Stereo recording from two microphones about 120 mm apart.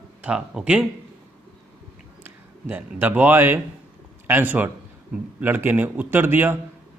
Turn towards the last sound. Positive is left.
turn(degrees=-20)  # may be behind; listen again after turning